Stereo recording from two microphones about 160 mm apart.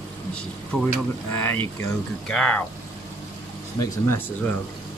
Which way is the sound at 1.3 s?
10° left (ahead or behind).